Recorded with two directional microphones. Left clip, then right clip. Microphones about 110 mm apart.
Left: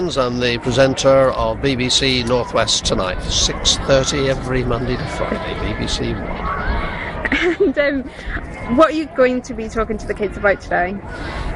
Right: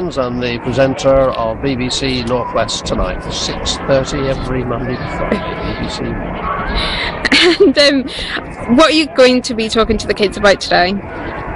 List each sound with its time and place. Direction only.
0.7 s speech: 25° left (ahead or behind)
7.2 s speech: 25° right (ahead or behind)